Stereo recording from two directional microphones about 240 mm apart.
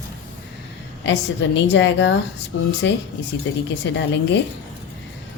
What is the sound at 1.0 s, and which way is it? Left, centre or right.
A woman's voice, left.